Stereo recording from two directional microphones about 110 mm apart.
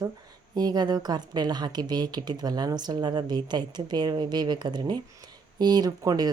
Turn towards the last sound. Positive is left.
turn(degrees=-35)  # may be behind; listen again after turning